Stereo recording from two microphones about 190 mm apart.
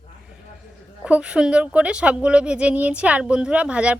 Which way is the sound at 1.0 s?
5° right (ahead or behind).